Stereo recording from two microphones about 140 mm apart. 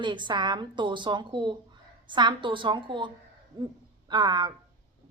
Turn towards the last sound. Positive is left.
turn(degrees=-30)  # may be behind; listen again after turning